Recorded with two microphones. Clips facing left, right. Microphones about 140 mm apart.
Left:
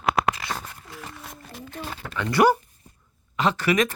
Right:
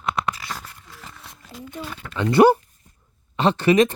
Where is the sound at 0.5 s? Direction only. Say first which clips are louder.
Left 2 dB; 55° left (ahead or behind).